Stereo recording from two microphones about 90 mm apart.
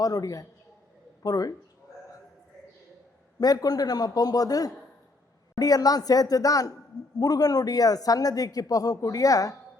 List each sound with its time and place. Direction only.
0.0 s speech: 45° left (ahead or behind)
3.4 s speech: 45° left (ahead or behind)